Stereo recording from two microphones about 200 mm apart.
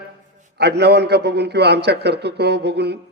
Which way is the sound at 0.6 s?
55° right (ahead or behind).